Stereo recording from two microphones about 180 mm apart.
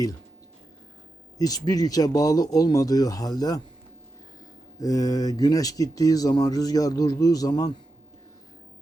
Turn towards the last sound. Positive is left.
turn(degrees=20)  # may be behind; listen again after turning